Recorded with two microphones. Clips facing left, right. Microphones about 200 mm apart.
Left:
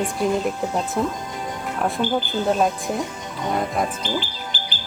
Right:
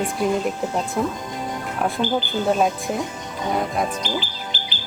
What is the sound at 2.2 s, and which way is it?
Speech, centre (ahead or behind).